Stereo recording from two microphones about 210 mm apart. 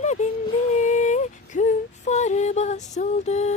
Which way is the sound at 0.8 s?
35° left (ahead or behind).